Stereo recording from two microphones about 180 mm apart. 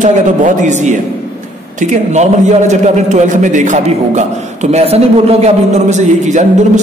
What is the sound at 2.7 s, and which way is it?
A man's voice, 40° right (ahead or behind).